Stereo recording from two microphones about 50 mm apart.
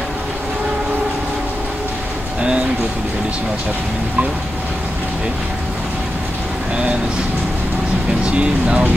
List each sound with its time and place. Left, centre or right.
8.3 s speech: right